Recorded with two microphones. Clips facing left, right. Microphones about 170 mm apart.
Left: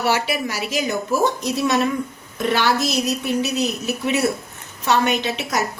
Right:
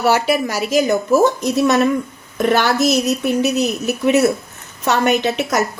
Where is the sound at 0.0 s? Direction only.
45° right (ahead or behind).